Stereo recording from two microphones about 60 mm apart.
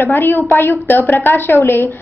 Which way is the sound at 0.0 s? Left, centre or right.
Left.